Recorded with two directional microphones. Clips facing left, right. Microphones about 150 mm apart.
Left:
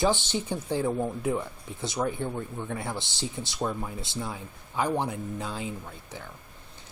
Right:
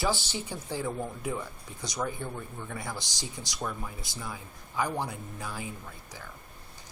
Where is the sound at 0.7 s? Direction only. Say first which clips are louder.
Left 6 dB; 20° left (ahead or behind).